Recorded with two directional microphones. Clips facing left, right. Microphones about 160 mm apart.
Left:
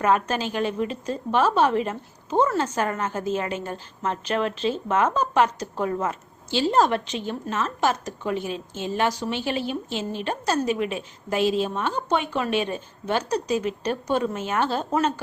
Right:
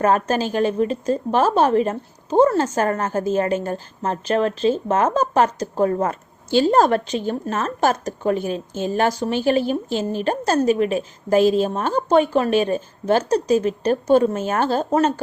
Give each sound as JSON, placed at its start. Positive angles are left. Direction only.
{"t": 0.0, "sound": "a woman's voice", "side_deg": -40}